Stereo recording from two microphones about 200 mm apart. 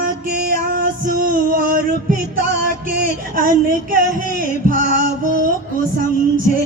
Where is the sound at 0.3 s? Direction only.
50° right (ahead or behind).